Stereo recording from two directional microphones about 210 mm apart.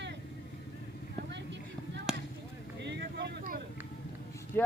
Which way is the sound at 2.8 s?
55° right (ahead or behind).